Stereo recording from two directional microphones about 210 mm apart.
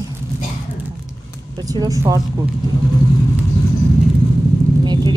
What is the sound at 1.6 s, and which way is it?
Speech, 20° right (ahead or behind).